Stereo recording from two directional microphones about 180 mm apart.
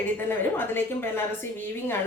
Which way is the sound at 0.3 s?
10° left (ahead or behind).